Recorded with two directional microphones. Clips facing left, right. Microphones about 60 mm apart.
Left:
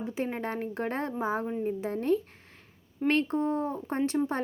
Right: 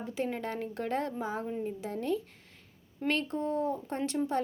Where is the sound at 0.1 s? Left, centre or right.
Left.